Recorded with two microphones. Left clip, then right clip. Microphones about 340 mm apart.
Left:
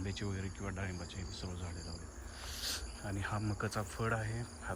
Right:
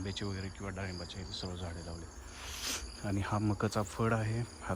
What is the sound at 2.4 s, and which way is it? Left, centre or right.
A man's voice, right.